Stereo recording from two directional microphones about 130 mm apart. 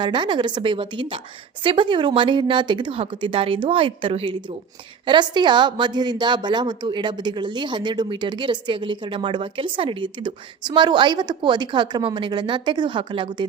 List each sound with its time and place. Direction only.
0.0 s a woman's voice: 35° right (ahead or behind)